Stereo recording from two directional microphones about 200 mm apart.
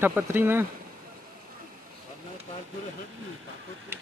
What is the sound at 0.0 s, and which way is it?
Speech, 10° right (ahead or behind).